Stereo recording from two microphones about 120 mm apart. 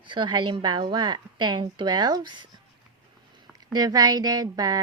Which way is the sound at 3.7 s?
35° right (ahead or behind).